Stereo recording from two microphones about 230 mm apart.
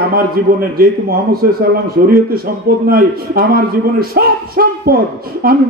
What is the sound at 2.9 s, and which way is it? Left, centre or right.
A man's voice, right.